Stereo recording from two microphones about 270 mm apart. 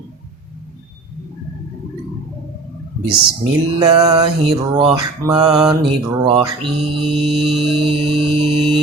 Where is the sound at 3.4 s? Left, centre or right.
Centre.